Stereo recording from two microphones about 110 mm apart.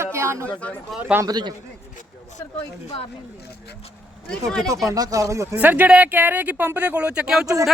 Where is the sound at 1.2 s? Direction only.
40° right (ahead or behind).